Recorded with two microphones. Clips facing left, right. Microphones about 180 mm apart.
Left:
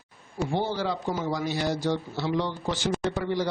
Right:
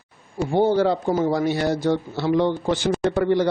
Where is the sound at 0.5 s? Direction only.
50° right (ahead or behind).